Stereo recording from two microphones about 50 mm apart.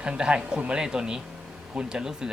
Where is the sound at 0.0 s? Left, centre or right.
Centre.